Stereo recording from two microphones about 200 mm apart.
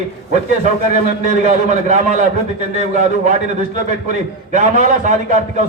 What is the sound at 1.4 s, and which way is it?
A man's voice, 35° right (ahead or behind).